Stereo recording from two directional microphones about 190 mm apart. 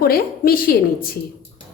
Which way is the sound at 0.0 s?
50° left (ahead or behind).